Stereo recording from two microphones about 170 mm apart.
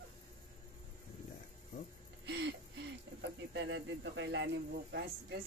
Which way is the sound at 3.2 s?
90° right.